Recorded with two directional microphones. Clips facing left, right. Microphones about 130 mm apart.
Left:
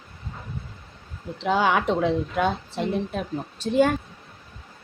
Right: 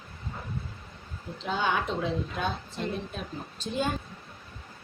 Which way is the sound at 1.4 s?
80° left.